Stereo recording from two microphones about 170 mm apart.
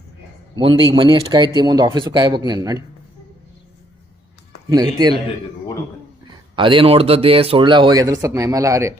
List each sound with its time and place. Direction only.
0.5 s speech: 30° right (ahead or behind)
4.7 s speech: 25° right (ahead or behind)
6.6 s speech: 30° right (ahead or behind)